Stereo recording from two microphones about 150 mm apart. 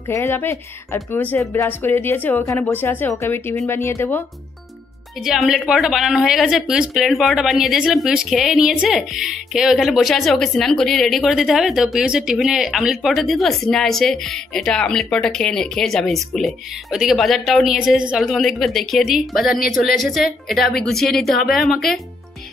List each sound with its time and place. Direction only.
0.1 s a woman's voice: 15° left (ahead or behind)
5.2 s a woman's voice: centre (ahead or behind)